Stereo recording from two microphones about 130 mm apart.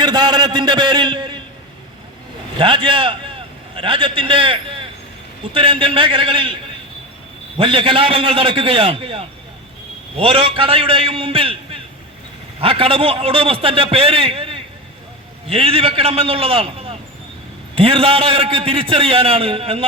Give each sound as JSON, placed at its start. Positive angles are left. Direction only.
{"t": 0.0, "sound": "a man's voice", "side_deg": -35}
{"t": 2.6, "sound": "a man's voice", "side_deg": -40}
{"t": 7.5, "sound": "a man's voice", "side_deg": -45}